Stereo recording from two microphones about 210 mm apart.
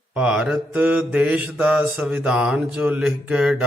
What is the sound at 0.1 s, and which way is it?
Mantra, 5° right (ahead or behind).